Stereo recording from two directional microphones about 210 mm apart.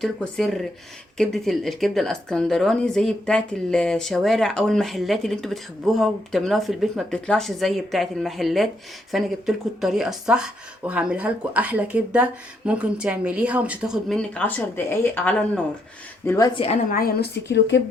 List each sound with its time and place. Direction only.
0.0 s a woman's voice: centre (ahead or behind)
16.9 s a woman's voice: 45° left (ahead or behind)